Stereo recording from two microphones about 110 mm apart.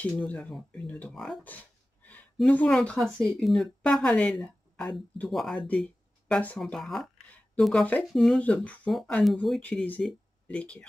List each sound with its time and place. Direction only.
0.0 s speech: 10° left (ahead or behind)
1.1 s speech: centre (ahead or behind)
1.4 s a sound: 15° left (ahead or behind)
2.4 s a woman's voice: 15° left (ahead or behind)
7.8 s speech: 10° left (ahead or behind)
8.1 s speech: centre (ahead or behind)
8.4 s speech: 10° left (ahead or behind)
9.6 s speech: 15° left (ahead or behind)